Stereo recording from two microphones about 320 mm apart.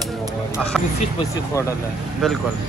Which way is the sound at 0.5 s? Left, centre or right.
Centre.